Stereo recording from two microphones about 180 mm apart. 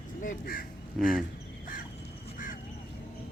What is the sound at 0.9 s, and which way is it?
Speech, centre (ahead or behind).